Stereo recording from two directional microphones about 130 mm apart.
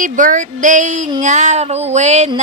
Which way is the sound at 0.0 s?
90° right.